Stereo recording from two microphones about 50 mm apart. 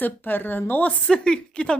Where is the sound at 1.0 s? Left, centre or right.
Centre.